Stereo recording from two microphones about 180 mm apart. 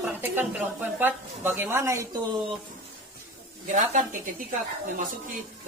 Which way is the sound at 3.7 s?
45° right (ahead or behind).